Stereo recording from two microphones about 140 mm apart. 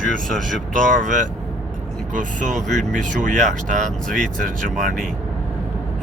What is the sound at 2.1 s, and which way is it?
Speech, 60° right (ahead or behind).